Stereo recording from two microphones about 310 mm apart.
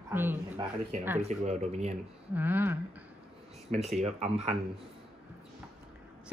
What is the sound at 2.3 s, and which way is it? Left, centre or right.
Speech, centre.